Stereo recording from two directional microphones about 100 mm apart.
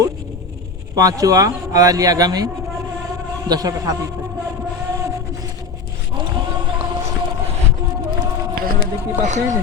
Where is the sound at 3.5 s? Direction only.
40° right (ahead or behind).